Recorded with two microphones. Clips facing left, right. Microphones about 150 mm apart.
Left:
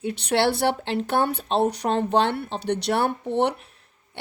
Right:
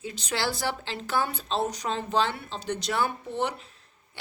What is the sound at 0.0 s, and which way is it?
A woman's voice, 65° left (ahead or behind).